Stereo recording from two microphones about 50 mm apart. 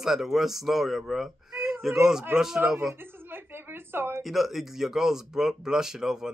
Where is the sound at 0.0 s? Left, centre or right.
Centre.